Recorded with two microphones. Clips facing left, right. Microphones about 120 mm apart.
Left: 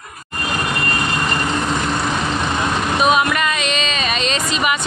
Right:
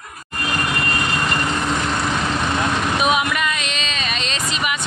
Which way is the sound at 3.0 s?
10° right (ahead or behind).